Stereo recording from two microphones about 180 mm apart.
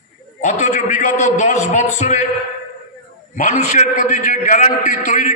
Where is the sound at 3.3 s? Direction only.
40° left (ahead or behind).